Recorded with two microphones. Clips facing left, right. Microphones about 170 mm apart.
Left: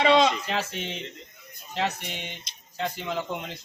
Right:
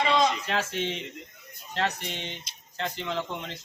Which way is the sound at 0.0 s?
75° left (ahead or behind).